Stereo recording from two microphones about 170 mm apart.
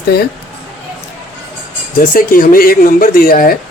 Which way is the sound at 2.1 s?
55° left (ahead or behind).